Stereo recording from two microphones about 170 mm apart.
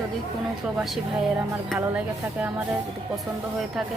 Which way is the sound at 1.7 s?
10° right (ahead or behind).